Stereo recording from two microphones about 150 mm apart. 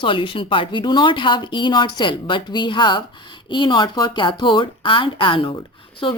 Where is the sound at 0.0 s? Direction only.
35° left (ahead or behind).